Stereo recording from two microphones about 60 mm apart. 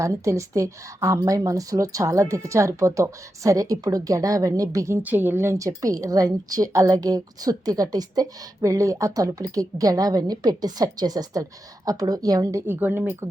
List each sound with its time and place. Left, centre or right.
0.0 s speech: right
5.0 s speech: right
5.5 s a woman's voice: right
12.6 s speech: right